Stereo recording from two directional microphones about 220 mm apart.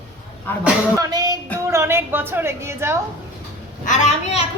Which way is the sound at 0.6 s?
15° right (ahead or behind).